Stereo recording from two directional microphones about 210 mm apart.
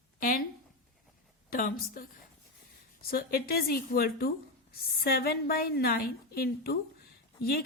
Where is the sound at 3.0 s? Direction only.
45° left (ahead or behind).